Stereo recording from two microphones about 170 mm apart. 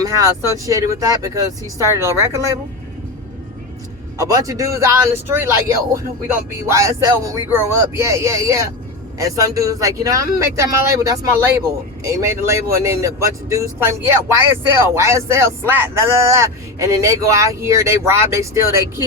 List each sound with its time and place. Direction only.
0.0 s speech: 20° right (ahead or behind)
4.2 s speech: 20° right (ahead or behind)